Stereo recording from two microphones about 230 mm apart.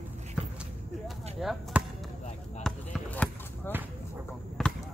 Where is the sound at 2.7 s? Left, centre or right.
Centre.